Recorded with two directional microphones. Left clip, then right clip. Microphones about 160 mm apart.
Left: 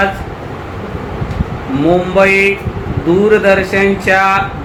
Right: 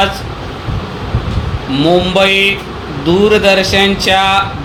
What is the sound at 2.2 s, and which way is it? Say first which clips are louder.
Speech: left 1 dB; 50° right (ahead or behind).